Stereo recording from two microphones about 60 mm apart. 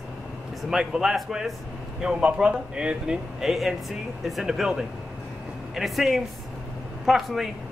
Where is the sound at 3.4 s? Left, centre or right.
Centre.